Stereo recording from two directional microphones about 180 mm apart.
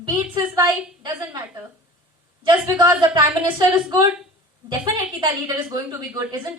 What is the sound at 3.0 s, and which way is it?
Speech, 25° right (ahead or behind).